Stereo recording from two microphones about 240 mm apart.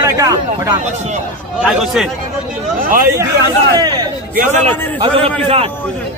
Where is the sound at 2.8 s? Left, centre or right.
Right.